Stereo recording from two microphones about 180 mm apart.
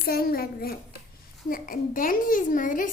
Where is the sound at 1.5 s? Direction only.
50° left (ahead or behind).